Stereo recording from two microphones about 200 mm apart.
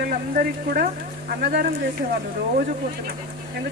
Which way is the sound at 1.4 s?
50° right (ahead or behind).